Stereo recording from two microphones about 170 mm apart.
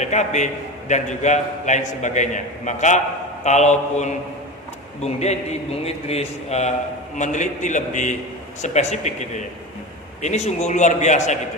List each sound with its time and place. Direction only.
0.0 s a man's voice: 45° left (ahead or behind)